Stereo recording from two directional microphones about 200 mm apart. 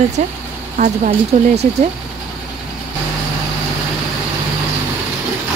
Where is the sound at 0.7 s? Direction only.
40° right (ahead or behind).